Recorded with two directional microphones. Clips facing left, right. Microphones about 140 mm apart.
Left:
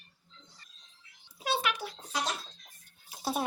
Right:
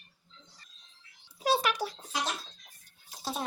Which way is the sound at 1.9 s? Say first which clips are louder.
Even; 5° right (ahead or behind).